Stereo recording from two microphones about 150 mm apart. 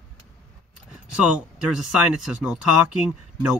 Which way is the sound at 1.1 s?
5° right (ahead or behind).